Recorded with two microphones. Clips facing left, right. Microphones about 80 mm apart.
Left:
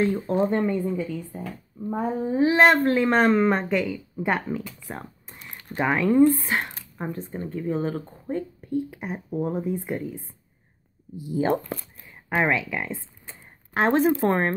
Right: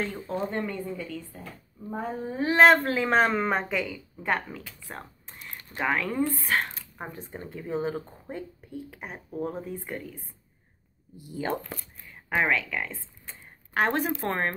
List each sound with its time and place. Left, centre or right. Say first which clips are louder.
0.3 s a woman's voice: left 8 dB; left
2.5 s a woman's voice: right 1 dB; centre
4.3 s speech: left 3 dB; centre
4.8 s a sound: left 4 dB; centre
5.8 s speech: left 7 dB; centre
6.3 s a woman's voice: left 1 dB; left
7.0 s speech: left 7 dB; centre
9.3 s a woman's voice: left 6 dB; centre